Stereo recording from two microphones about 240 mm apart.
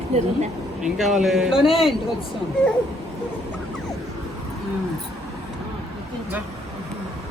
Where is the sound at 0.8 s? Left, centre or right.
Centre.